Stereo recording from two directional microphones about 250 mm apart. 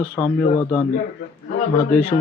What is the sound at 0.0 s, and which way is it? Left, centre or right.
Speech, centre.